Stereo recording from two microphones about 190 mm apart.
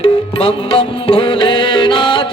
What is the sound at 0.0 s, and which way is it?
Music, 30° left (ahead or behind).